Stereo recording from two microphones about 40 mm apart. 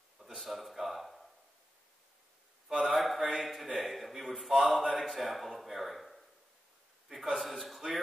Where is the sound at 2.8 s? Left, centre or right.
Centre.